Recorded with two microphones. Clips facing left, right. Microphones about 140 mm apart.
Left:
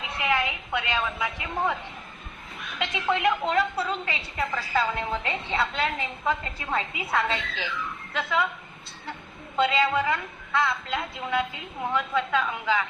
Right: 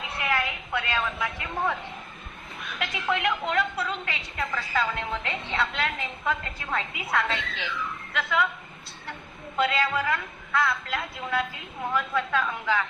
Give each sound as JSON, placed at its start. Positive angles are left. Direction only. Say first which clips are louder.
{"t": 0.2, "sound": "a woman's voice", "louder": "left 2 dB", "side_deg": 20}
{"t": 2.7, "sound": "a woman's voice", "louder": "left 2 dB", "side_deg": 25}
{"t": 9.6, "sound": "a woman's voice", "louder": "left 2 dB", "side_deg": 25}